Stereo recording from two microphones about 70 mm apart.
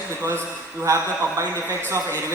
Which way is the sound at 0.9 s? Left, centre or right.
Right.